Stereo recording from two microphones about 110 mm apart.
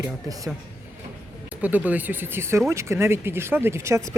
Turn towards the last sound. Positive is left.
turn(degrees=-25)  # may be behind; listen again after turning